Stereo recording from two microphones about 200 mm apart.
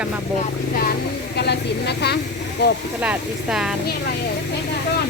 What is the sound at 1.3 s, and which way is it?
A woman's voice, 55° left (ahead or behind).